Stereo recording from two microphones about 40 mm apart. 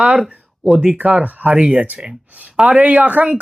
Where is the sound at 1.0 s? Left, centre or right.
Right.